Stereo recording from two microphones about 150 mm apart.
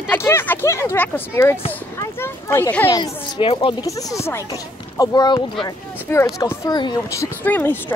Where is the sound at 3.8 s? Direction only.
20° left (ahead or behind).